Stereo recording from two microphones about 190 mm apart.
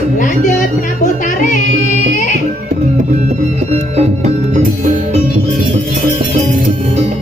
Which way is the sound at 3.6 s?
35° right (ahead or behind).